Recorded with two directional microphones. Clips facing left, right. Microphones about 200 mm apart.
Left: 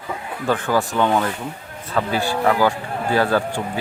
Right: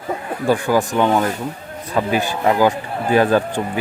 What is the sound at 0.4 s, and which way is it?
A man's voice, 15° right (ahead or behind).